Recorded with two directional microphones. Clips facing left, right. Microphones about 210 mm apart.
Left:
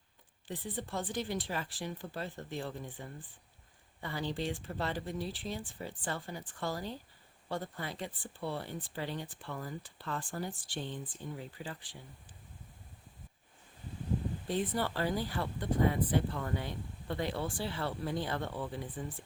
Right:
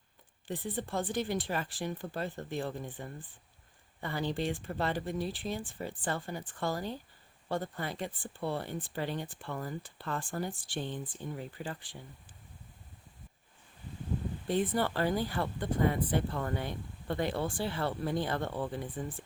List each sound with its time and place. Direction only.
0.4 s speech: 50° right (ahead or behind)
14.5 s speech: 55° right (ahead or behind)